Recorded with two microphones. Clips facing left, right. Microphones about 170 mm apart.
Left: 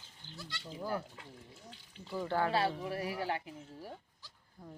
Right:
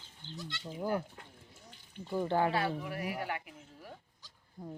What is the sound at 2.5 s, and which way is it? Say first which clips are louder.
Speech: left 1 dB; 30° left (ahead or behind).